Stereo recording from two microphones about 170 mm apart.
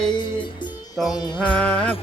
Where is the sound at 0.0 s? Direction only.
25° left (ahead or behind).